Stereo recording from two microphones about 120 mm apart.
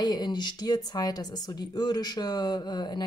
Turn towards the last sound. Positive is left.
turn(degrees=40)  # may be behind; listen again after turning